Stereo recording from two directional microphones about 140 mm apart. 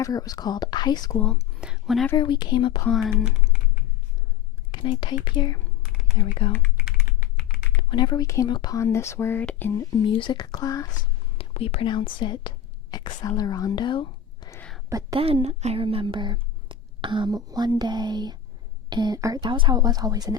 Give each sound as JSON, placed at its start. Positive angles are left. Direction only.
{"t": 0.0, "sound": "speech", "side_deg": 25}
{"t": 1.1, "sound": "speech", "side_deg": 10}
{"t": 1.6, "sound": "speech", "side_deg": -5}
{"t": 2.1, "sound": "speech", "side_deg": 30}
{"t": 2.9, "sound": "speech", "side_deg": 0}
{"t": 4.7, "sound": "speech", "side_deg": 35}
{"t": 6.2, "sound": "speech", "side_deg": 25}
{"t": 6.9, "sound": "typing", "side_deg": 90}
{"t": 7.8, "sound": "speech", "side_deg": 35}
{"t": 11.3, "sound": "speech", "side_deg": 45}
{"t": 15.1, "sound": "a woman's voice", "side_deg": -45}